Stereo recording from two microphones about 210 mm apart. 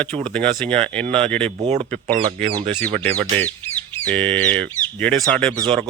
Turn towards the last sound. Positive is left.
turn(degrees=-25)  # may be behind; listen again after turning